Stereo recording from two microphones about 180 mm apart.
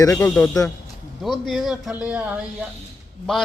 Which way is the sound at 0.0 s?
15° left (ahead or behind).